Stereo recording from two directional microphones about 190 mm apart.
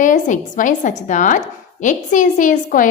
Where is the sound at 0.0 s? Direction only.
40° left (ahead or behind).